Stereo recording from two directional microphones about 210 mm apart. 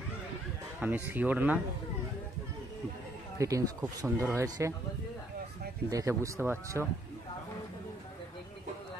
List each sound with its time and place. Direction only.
0.7 s speech: 10° right (ahead or behind)
3.3 s speech: 15° right (ahead or behind)
5.9 s speech: 15° right (ahead or behind)